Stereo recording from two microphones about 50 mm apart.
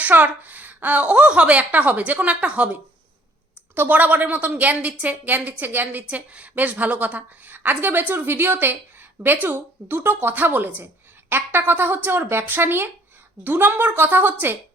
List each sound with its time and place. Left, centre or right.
0.0 s a woman's voice: right
3.8 s a woman's voice: right